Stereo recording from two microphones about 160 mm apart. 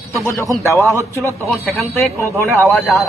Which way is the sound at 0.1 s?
20° left (ahead or behind).